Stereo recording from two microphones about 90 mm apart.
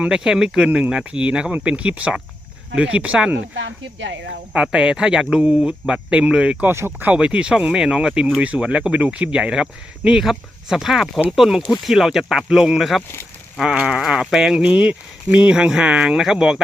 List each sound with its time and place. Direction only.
0.0 s speech: 10° right (ahead or behind)
4.5 s speech: 10° right (ahead or behind)
6.7 s speech: 25° right (ahead or behind)
7.1 s speech: 10° right (ahead or behind)